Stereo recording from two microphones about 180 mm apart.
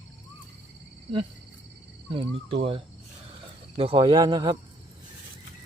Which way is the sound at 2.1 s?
30° right (ahead or behind).